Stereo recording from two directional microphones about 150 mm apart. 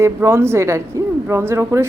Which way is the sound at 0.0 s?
15° right (ahead or behind).